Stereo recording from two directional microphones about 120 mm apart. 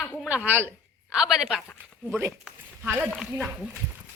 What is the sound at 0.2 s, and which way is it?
Speech, 10° right (ahead or behind).